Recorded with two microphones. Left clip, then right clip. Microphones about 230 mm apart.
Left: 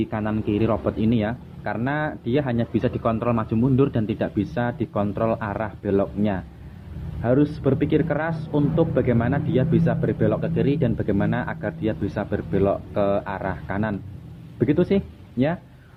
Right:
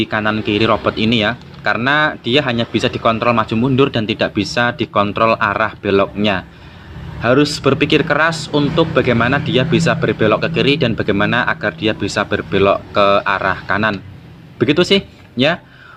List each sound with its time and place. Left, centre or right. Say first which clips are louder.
0.0 s speech: right 9 dB; centre